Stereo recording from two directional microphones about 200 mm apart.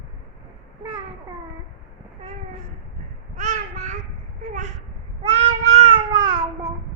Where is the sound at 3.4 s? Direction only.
40° right (ahead or behind).